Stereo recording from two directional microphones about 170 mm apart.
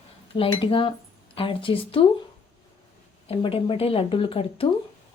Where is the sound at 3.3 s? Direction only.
35° left (ahead or behind).